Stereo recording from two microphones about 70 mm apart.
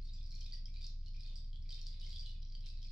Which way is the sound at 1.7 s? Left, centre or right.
Centre.